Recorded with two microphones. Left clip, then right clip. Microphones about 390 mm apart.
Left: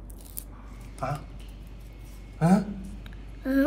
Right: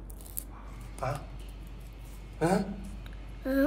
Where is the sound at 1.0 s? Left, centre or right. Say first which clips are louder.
Left 2 dB; centre.